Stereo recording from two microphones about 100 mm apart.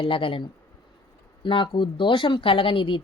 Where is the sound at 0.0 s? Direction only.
60° left (ahead or behind).